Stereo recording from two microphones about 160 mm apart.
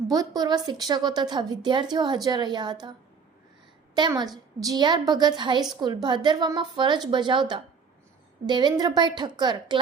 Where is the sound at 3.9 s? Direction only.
25° right (ahead or behind).